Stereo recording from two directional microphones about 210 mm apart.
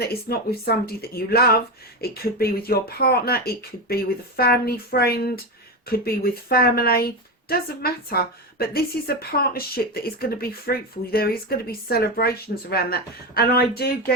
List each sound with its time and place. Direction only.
0.0 s speech: 50° left (ahead or behind)